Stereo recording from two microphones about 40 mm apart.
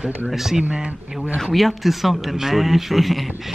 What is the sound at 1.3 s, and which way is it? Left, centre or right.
Speech, centre.